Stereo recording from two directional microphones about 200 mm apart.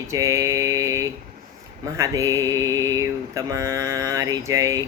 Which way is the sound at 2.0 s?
15° right (ahead or behind).